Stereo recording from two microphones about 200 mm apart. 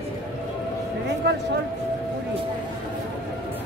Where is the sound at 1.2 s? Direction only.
55° right (ahead or behind).